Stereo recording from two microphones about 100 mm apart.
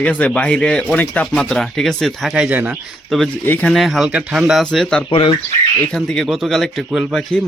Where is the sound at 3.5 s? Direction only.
15° left (ahead or behind).